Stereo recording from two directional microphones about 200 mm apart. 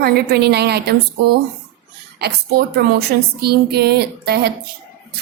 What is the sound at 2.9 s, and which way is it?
A woman's voice, 50° right (ahead or behind).